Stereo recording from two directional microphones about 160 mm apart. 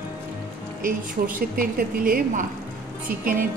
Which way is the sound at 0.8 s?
60° right (ahead or behind).